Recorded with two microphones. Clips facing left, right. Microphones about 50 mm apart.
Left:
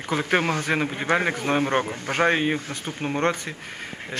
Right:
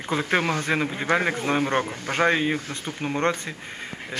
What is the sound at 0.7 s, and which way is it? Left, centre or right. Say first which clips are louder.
A man's voice: even; centre.